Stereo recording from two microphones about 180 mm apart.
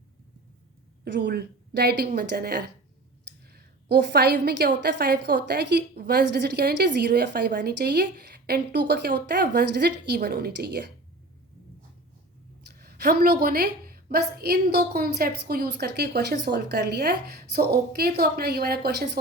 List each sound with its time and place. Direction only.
1.0 s a woman's voice: 75° right (ahead or behind)
12.8 s a woman's voice: 60° right (ahead or behind)